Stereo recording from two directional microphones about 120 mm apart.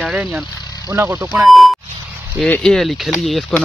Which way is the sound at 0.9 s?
20° right (ahead or behind).